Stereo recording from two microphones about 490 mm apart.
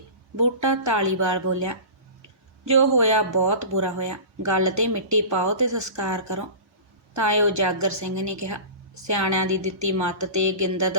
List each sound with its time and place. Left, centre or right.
0.4 s speech: right